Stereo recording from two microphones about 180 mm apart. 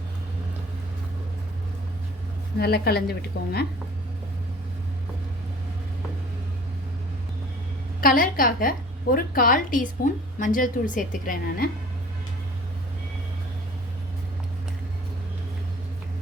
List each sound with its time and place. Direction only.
2.6 s a woman's voice: 65° left (ahead or behind)
8.0 s a woman's voice: 50° left (ahead or behind)